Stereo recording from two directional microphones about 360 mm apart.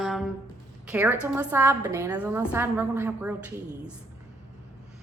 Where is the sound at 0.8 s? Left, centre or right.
Centre.